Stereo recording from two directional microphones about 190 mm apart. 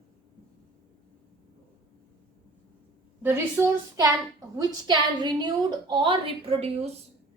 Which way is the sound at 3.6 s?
15° right (ahead or behind).